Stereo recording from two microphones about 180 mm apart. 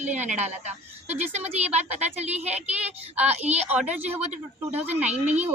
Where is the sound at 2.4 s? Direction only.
5° right (ahead or behind).